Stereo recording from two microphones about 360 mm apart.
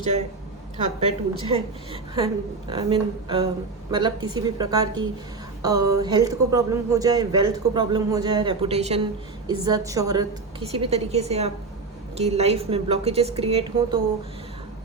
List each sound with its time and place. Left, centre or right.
0.8 s a woman's voice: centre